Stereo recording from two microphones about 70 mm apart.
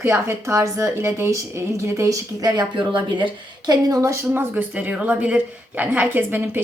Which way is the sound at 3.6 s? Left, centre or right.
Right.